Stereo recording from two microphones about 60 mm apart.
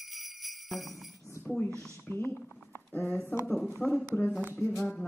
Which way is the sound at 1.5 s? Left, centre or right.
Centre.